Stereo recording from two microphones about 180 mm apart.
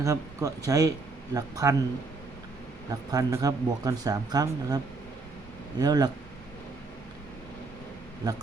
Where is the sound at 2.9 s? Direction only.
20° right (ahead or behind).